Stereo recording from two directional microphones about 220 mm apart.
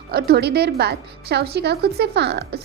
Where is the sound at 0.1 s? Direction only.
45° right (ahead or behind).